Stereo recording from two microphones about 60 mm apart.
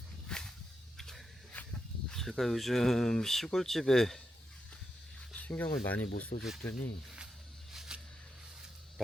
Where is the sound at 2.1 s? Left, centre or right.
Centre.